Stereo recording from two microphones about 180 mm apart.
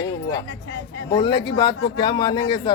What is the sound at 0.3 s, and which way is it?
Speech, 80° left.